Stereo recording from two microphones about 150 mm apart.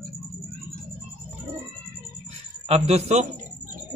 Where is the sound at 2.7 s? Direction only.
45° right (ahead or behind).